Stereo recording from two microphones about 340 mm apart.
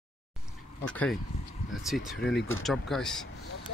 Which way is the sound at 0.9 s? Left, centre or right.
Centre.